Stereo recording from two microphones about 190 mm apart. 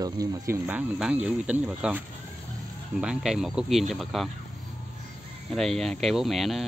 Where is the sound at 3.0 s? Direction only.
5° right (ahead or behind).